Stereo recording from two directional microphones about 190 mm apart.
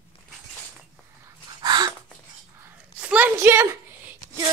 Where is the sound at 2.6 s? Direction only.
10° right (ahead or behind).